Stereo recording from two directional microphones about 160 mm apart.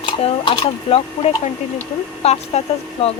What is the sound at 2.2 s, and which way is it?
Speech, 40° left (ahead or behind).